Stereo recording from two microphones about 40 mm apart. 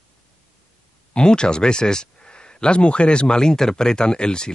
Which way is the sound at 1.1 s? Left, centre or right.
Left.